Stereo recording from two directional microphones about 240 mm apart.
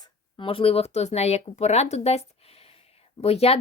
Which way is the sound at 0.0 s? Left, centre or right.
Left.